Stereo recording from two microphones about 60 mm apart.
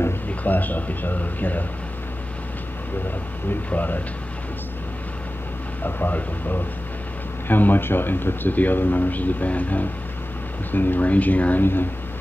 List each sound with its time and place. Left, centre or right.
0.3 s speech: left
3.4 s speech: left
5.9 s speech: left